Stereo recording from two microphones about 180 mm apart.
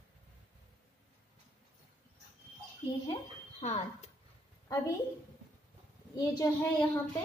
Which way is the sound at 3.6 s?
35° left (ahead or behind).